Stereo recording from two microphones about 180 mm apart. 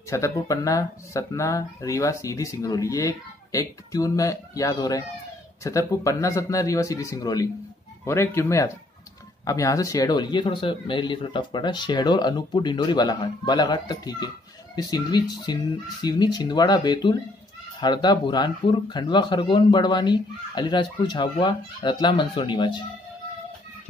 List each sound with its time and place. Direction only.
0.1 s speech: 15° left (ahead or behind)